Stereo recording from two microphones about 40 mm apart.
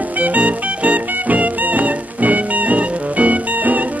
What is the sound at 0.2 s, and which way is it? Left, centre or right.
Music, right.